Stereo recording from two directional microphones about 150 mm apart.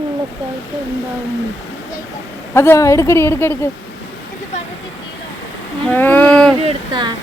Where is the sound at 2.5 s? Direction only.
20° left (ahead or behind).